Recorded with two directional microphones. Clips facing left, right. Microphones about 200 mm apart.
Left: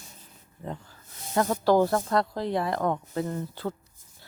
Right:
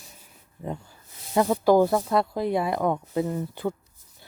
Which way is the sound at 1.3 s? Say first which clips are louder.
Right 3 dB; 10° right (ahead or behind).